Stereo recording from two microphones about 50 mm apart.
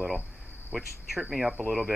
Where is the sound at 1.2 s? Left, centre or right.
Centre.